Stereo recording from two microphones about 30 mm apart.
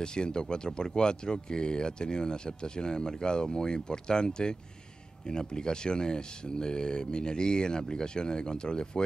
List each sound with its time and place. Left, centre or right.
0.0 s speech: left